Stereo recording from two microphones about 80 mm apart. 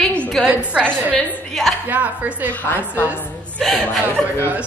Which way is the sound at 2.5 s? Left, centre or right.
Left.